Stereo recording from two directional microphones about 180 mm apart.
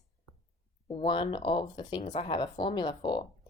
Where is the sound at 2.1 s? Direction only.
40° left (ahead or behind).